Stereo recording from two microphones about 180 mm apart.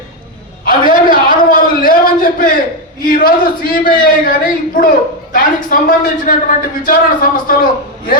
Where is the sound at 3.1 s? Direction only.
55° left (ahead or behind).